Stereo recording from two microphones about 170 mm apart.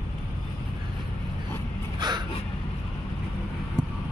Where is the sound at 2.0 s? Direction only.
25° right (ahead or behind).